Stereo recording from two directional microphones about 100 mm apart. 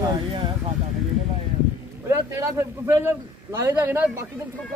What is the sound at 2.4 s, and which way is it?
A man's voice, 25° right (ahead or behind).